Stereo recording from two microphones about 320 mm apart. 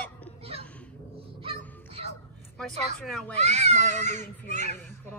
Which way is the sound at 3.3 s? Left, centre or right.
Right.